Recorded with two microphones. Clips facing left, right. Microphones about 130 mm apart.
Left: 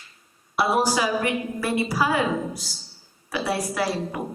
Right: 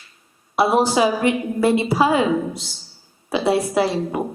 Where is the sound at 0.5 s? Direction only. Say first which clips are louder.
Right 5 dB; 25° right (ahead or behind).